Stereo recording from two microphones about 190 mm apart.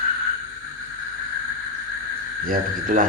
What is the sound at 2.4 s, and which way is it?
Speech, 45° right (ahead or behind).